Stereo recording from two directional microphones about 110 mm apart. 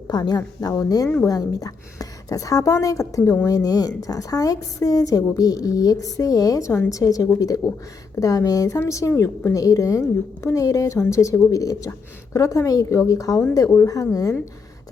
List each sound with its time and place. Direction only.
0.1 s a woman's voice: 40° left (ahead or behind)